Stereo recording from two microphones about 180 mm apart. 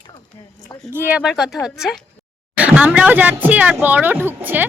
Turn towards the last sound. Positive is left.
turn(degrees=-10)  # may be behind; listen again after turning